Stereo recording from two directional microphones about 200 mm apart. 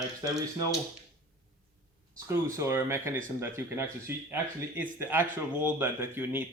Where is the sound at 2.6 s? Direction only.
15° right (ahead or behind).